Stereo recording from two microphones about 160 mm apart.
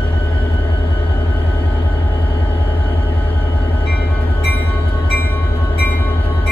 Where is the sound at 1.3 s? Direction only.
10° left (ahead or behind).